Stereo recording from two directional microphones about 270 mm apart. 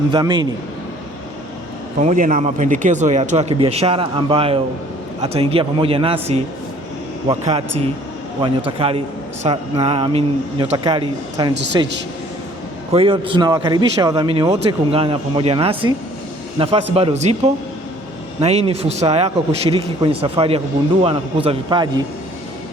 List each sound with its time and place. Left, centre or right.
0.1 s a man's voice: centre
2.0 s speech: right
7.3 s a man's voice: right